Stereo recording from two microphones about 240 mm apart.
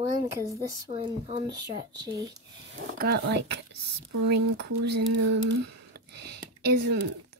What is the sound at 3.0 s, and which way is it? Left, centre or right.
Speech, right.